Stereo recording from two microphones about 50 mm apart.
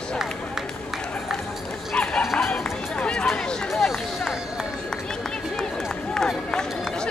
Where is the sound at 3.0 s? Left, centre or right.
Left.